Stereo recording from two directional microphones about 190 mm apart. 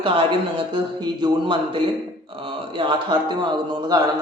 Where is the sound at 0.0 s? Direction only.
25° right (ahead or behind).